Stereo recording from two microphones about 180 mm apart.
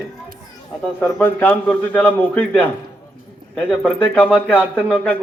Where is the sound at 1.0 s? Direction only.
10° left (ahead or behind).